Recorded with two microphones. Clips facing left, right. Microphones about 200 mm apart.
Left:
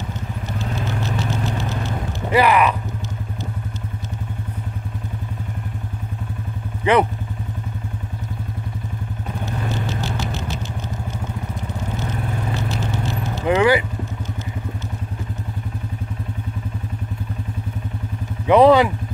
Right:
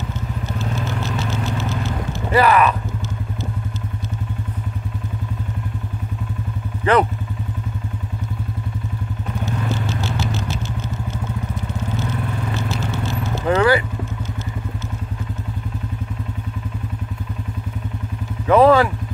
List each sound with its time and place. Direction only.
2.3 s speech: 15° left (ahead or behind)
6.8 s speech: 10° left (ahead or behind)
13.5 s vehicle: 15° left (ahead or behind)
18.5 s vehicle: 15° left (ahead or behind)